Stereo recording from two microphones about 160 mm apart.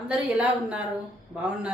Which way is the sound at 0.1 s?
5° right (ahead or behind).